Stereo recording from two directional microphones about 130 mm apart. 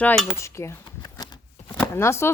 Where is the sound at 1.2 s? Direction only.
30° left (ahead or behind).